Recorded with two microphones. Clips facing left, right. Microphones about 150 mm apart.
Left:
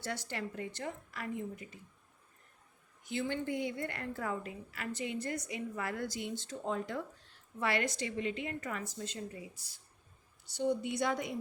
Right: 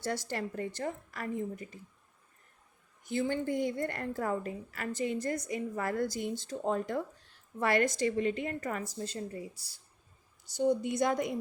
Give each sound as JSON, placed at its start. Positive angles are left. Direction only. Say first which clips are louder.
{"t": 0.0, "sound": "a woman's voice", "louder": "right 5 dB", "side_deg": -40}
{"t": 3.0, "sound": "a woman's voice", "louder": "right 4 dB", "side_deg": -45}